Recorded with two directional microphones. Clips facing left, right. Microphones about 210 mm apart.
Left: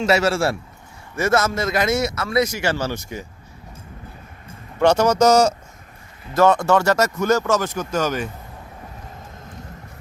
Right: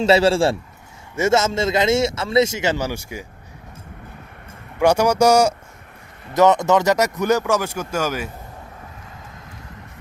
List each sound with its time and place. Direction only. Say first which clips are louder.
0.0 s speech: right 3 dB; 30° right (ahead or behind); by 3.2 s 10° right (ahead or behind)
4.8 s speech: even; 10° right (ahead or behind)